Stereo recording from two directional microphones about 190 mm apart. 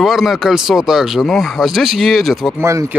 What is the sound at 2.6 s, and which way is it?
Speech, 15° right (ahead or behind).